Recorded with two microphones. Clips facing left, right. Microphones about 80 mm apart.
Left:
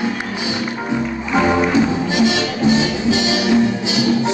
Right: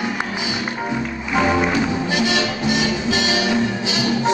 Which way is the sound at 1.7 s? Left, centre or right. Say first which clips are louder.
Left 4 dB; left.